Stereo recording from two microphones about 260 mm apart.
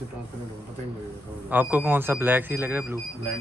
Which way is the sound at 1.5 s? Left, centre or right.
Centre.